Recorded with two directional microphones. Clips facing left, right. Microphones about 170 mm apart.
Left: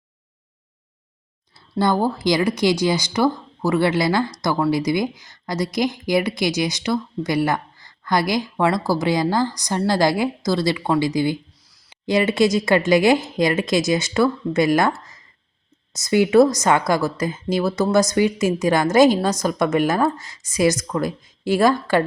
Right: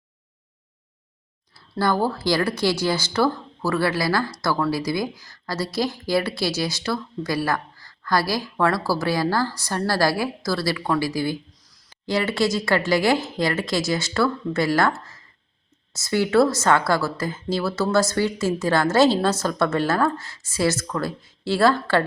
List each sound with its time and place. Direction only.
1.7 s speech: 20° left (ahead or behind)
11.5 s a sound: 10° left (ahead or behind)
12.0 s a woman's voice: 20° left (ahead or behind)